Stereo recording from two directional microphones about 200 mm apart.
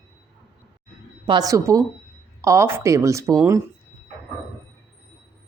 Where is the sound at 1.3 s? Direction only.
20° right (ahead or behind).